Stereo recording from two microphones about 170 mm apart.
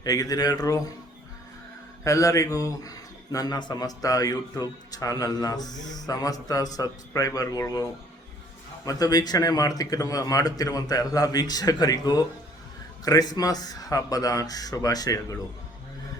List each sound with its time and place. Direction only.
0.0 s a man's voice: 20° left (ahead or behind)
2.0 s a man's voice: 20° left (ahead or behind)